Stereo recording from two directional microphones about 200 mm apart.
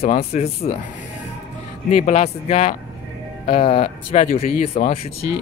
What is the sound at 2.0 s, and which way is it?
Speech, 30° left (ahead or behind).